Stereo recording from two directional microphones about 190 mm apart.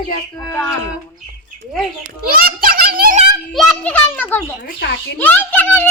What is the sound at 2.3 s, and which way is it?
Giggle, 50° right (ahead or behind).